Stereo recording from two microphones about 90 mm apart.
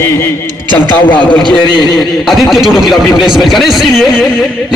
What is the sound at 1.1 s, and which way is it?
Speech, 60° left (ahead or behind).